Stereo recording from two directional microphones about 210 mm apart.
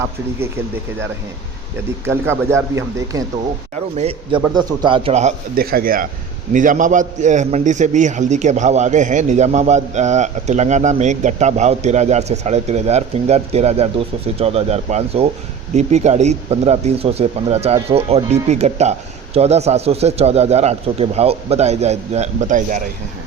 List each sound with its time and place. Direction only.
2.0 s speech: 10° right (ahead or behind)
3.9 s speech: 25° right (ahead or behind)
5.5 s a man's voice: 45° right (ahead or behind)